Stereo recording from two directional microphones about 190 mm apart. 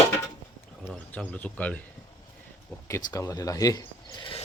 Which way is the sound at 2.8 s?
15° left (ahead or behind).